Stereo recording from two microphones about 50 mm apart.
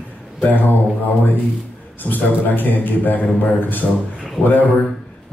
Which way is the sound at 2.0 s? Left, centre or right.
Left.